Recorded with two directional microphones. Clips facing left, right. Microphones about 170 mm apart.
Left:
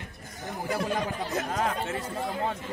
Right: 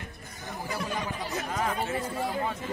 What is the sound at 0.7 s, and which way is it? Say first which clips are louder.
Speech: left 4 dB; 50° left (ahead or behind).